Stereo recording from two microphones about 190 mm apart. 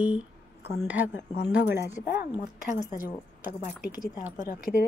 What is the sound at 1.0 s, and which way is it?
Speech, 70° left (ahead or behind).